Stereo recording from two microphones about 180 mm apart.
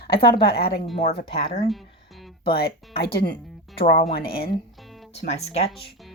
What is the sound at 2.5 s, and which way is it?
Speech, 60° left (ahead or behind).